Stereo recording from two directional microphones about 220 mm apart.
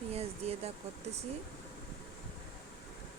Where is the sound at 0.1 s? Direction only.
30° right (ahead or behind).